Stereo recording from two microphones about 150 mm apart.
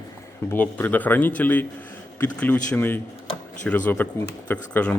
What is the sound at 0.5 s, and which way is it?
Speech, 10° left (ahead or behind).